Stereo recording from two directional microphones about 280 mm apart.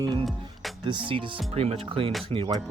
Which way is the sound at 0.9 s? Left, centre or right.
Centre.